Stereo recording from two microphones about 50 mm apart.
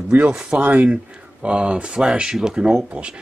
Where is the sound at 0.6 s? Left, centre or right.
Right.